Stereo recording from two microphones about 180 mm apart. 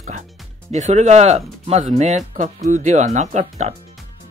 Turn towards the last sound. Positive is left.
turn(degrees=-40)  # may be behind; listen again after turning